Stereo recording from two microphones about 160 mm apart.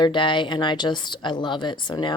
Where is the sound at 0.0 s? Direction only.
30° left (ahead or behind).